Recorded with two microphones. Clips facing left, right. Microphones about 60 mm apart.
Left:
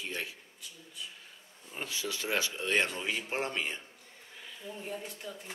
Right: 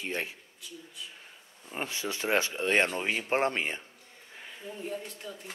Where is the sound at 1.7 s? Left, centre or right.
Right.